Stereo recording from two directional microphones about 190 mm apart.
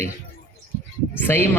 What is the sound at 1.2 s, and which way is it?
Speech, 10° left (ahead or behind).